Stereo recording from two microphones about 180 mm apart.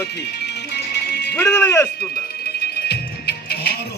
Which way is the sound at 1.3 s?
10° left (ahead or behind).